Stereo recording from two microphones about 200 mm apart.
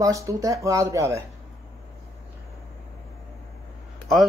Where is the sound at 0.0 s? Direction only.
15° right (ahead or behind).